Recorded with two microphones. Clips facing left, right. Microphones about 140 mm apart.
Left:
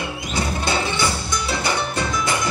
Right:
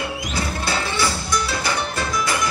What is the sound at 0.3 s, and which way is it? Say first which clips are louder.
Music: left 4 dB; 25° left (ahead or behind).